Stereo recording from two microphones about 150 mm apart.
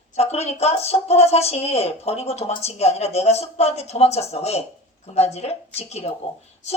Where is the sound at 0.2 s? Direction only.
45° left (ahead or behind).